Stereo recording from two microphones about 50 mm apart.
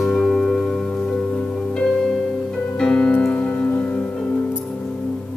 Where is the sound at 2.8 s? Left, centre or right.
Centre.